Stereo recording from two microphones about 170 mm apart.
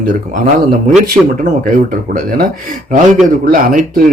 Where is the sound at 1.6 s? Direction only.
50° right (ahead or behind).